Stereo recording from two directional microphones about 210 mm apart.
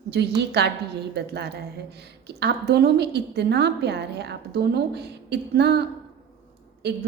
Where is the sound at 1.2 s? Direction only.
50° right (ahead or behind).